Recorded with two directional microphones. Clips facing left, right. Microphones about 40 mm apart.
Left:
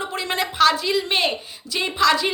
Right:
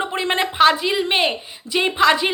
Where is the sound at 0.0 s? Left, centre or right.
Right.